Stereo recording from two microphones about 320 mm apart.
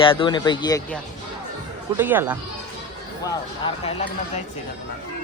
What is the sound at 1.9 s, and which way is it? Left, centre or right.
Speech, centre.